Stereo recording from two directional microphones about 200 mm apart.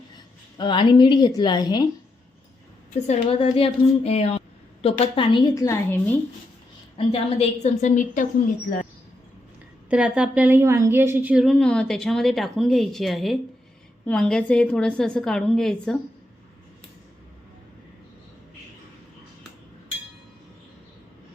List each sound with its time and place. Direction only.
0.5 s a woman's voice: 25° left (ahead or behind)
3.1 s a woman's voice: 25° left (ahead or behind)
6.9 s a woman's voice: 30° left (ahead or behind)
9.9 s a woman's voice: 5° right (ahead or behind)